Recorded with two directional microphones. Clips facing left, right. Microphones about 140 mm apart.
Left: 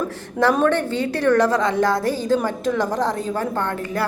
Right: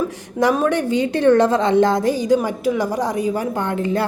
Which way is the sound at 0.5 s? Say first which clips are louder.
Right 1 dB; 10° right (ahead or behind).